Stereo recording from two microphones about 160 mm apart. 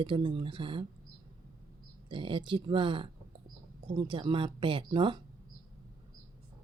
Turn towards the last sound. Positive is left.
turn(degrees=-30)  # may be behind; listen again after turning